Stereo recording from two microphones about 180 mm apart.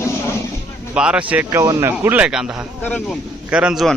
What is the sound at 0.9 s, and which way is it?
A man's voice, 5° right (ahead or behind).